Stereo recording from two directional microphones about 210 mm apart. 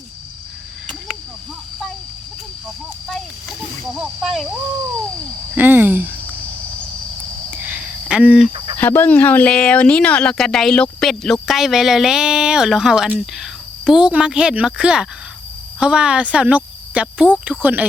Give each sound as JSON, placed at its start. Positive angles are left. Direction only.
{"t": 3.9, "sound": "speech", "side_deg": 0}
{"t": 5.5, "sound": "speech", "side_deg": -10}
{"t": 7.5, "sound": "cricket", "side_deg": -5}
{"t": 8.5, "sound": "a sound", "side_deg": -25}
{"t": 8.8, "sound": "speech", "side_deg": 10}